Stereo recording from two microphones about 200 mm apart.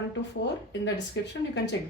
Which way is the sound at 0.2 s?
60° left (ahead or behind).